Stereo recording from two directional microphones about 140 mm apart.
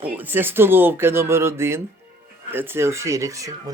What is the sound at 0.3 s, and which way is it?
Speech, 15° right (ahead or behind).